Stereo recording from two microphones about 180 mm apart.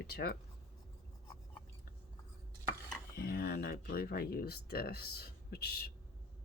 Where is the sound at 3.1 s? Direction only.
60° left (ahead or behind).